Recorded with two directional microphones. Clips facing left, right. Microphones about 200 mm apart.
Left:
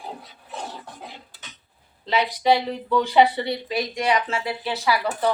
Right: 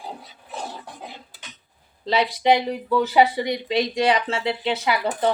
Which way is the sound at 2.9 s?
5° right (ahead or behind).